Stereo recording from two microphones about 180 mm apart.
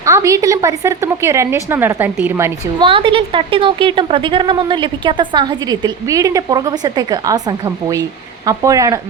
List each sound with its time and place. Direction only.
0.0 s a woman's voice: 15° right (ahead or behind)
2.7 s a woman's voice: 30° right (ahead or behind)